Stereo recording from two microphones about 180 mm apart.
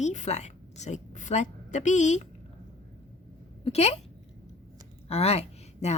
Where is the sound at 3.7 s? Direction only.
35° left (ahead or behind).